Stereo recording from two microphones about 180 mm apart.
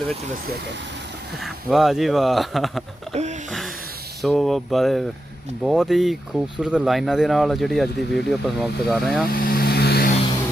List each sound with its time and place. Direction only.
1.5 s speech: centre (ahead or behind)
3.1 s a sound: 40° right (ahead or behind)
4.2 s speech: centre (ahead or behind)
9.3 s vehicle: 55° left (ahead or behind)